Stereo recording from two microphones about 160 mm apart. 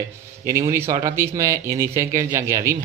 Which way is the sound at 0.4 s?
20° right (ahead or behind).